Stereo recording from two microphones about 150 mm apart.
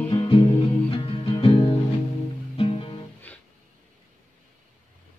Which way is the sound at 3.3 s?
10° left (ahead or behind).